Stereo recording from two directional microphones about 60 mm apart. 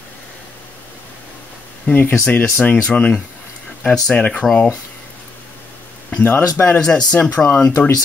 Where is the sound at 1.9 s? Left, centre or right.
Left.